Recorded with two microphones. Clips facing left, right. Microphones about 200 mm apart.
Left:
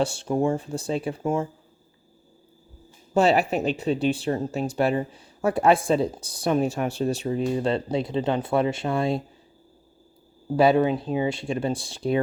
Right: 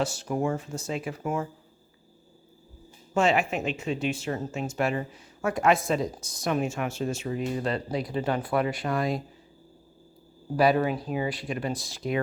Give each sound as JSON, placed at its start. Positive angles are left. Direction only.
{"t": 0.0, "sound": "speech", "side_deg": 30}
{"t": 3.2, "sound": "speech", "side_deg": 35}
{"t": 10.6, "sound": "speech", "side_deg": 25}